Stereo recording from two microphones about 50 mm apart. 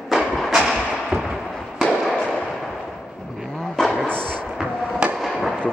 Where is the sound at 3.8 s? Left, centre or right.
Centre.